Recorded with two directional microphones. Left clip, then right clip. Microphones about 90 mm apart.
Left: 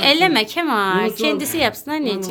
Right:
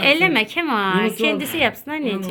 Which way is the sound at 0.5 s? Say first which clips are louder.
Left 2 dB; 10° left (ahead or behind).